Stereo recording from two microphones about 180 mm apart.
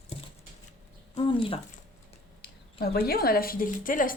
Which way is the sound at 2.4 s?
60° left (ahead or behind).